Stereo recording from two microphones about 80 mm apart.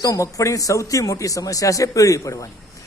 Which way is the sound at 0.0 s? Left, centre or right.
Left.